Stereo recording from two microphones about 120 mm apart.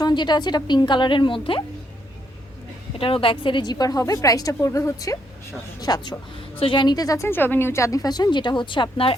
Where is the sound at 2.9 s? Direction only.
50° left (ahead or behind); by 6.1 s 35° left (ahead or behind).